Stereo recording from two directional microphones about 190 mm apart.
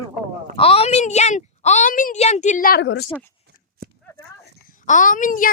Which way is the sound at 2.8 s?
70° left (ahead or behind).